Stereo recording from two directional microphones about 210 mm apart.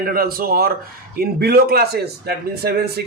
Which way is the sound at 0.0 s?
45° right (ahead or behind).